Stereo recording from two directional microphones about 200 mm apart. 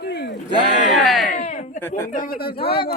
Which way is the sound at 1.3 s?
35° left (ahead or behind).